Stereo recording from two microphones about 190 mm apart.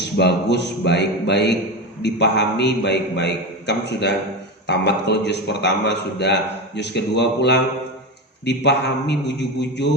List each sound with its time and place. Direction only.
0.0 s a man's voice: 65° left (ahead or behind)